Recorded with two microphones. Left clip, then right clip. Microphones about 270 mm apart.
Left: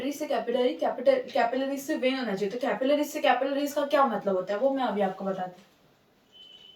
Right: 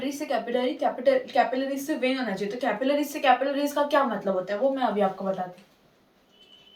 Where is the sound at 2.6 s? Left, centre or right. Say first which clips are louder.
Right 1 dB; centre.